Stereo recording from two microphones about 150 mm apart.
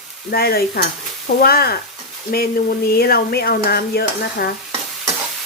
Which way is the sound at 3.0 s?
90° left.